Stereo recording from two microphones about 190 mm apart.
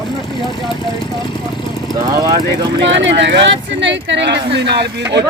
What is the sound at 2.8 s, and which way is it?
Speech, 70° right (ahead or behind).